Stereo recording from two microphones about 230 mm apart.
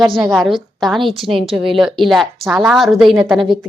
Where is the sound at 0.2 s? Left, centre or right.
Centre.